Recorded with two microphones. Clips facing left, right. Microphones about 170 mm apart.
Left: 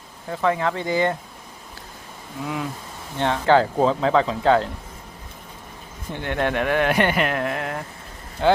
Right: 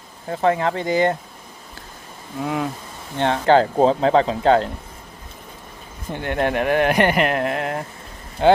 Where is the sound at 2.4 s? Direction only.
50° right (ahead or behind).